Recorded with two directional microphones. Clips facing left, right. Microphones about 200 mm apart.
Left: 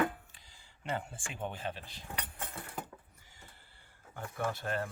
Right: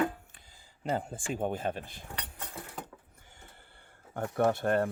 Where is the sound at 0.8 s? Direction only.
40° right (ahead or behind).